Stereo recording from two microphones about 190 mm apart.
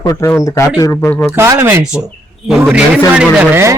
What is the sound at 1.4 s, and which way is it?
Speech, 15° right (ahead or behind).